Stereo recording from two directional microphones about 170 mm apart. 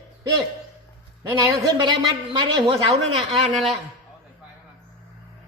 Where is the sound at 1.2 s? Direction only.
20° right (ahead or behind).